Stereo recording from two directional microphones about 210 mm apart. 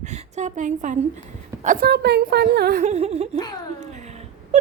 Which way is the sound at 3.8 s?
35° right (ahead or behind).